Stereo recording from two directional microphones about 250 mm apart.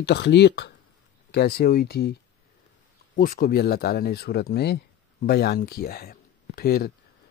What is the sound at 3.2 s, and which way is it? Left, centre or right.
Speech, left.